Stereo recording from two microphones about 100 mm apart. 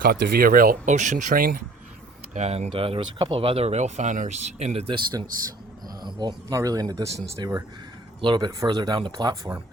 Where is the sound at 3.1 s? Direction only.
55° right (ahead or behind); by 4.9 s 90° right.